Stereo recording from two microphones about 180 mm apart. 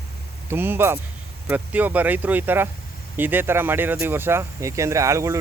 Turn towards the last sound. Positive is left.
turn(degrees=-15)  # may be behind; listen again after turning